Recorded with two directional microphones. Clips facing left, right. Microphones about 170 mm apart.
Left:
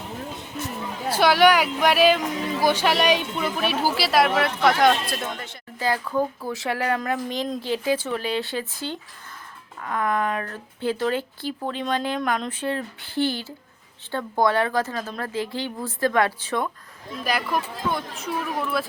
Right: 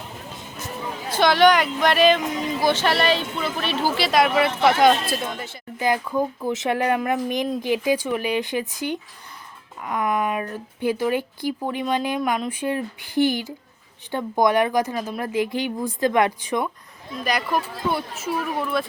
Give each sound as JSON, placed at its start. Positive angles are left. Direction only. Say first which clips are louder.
{"t": 1.1, "sound": "speech", "louder": "right 1 dB", "side_deg": 10}
{"t": 5.8, "sound": "speech", "louder": "right 2 dB", "side_deg": -15}
{"t": 17.2, "sound": "speech", "louder": "right 1 dB", "side_deg": 0}